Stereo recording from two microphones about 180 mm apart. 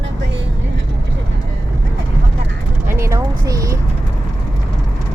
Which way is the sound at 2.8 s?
15° right (ahead or behind).